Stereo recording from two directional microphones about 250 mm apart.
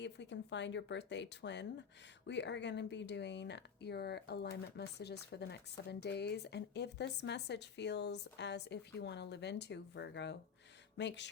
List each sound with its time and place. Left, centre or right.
0.0 s speech: left